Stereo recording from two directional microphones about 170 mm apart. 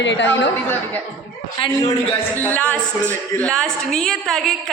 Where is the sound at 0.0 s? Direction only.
90° left.